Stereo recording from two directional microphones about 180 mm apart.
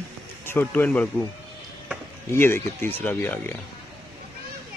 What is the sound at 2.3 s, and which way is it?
Speech, 15° left (ahead or behind).